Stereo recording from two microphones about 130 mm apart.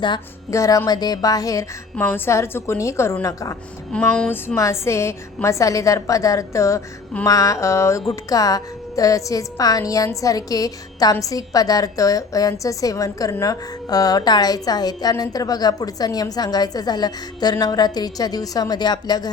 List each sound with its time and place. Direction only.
0.5 s a woman's voice: 25° left (ahead or behind)
2.0 s a woman's voice: 15° left (ahead or behind)
3.9 s a woman's voice: 10° left (ahead or behind); by 19.3 s 30° left (ahead or behind)